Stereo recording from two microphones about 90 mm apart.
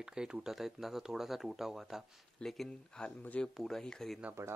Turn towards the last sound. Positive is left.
turn(degrees=5)  # may be behind; listen again after turning